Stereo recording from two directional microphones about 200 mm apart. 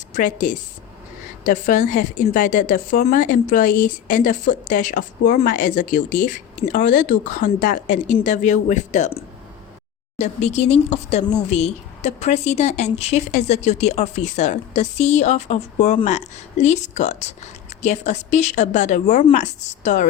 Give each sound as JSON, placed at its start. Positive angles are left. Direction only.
{"t": 0.1, "sound": "a woman's voice", "side_deg": 40}